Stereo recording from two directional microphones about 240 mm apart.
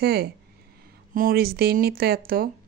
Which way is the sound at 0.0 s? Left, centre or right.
Right.